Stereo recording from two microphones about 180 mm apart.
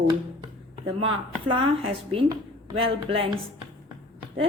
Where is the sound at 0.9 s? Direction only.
30° right (ahead or behind).